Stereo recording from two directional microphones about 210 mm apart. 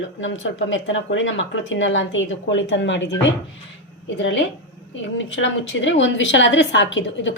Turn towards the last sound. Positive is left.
turn(degrees=60)  # may be behind; listen again after turning